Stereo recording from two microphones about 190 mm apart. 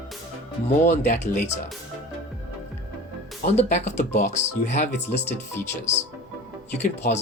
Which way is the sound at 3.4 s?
40° left (ahead or behind).